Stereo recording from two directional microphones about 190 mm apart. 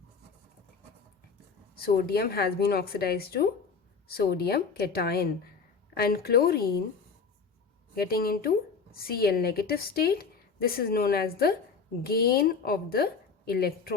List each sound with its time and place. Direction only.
1.8 s a woman's voice: 55° left (ahead or behind)
7.9 s a woman's voice: 50° left (ahead or behind)